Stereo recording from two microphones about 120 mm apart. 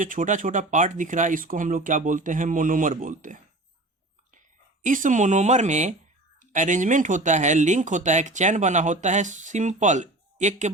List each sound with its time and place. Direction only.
0.0 s speech: 90° right
4.8 s speech: 90° right
6.4 s speech: 90° right